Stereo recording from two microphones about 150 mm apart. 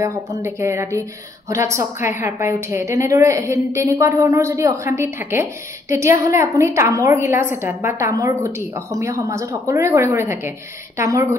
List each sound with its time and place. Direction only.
0.0 s a woman's voice: 20° right (ahead or behind)